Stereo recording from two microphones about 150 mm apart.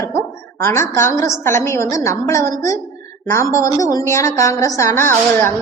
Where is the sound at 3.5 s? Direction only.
25° left (ahead or behind).